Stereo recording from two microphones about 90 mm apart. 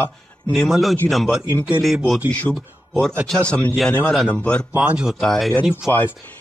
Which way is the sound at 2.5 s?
10° left (ahead or behind).